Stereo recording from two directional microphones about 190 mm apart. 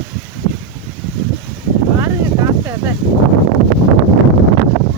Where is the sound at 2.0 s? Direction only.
15° right (ahead or behind).